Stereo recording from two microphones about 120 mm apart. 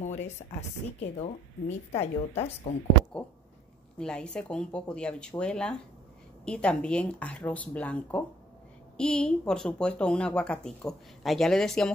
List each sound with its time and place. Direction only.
0.0 s a woman's voice: 75° left (ahead or behind)
4.0 s speech: 5° left (ahead or behind)